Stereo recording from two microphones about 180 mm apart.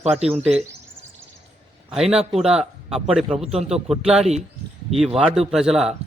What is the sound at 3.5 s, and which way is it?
Speech, 35° right (ahead or behind).